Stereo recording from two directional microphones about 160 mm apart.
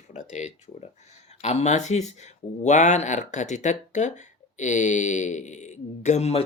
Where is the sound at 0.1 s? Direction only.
45° left (ahead or behind).